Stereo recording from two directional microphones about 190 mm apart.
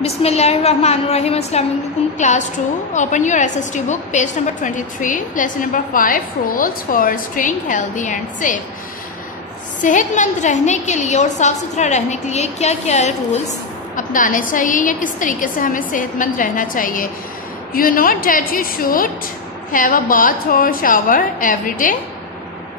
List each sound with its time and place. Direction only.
0.0 s a woman's voice: 35° left (ahead or behind)
9.8 s a woman's voice: 40° left (ahead or behind)